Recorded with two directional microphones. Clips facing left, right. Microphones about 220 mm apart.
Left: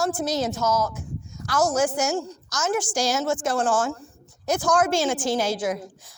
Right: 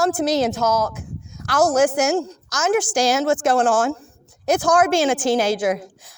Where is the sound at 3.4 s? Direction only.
55° right (ahead or behind).